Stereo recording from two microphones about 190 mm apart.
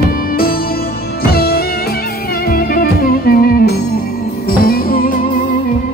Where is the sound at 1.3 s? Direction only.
55° left (ahead or behind).